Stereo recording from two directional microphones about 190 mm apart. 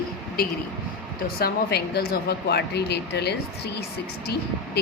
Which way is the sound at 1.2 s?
55° left (ahead or behind).